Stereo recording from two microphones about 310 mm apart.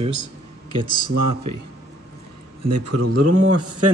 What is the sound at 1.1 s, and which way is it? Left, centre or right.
Speech, right.